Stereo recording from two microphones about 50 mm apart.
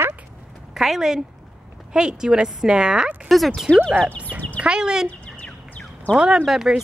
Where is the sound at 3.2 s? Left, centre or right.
Centre.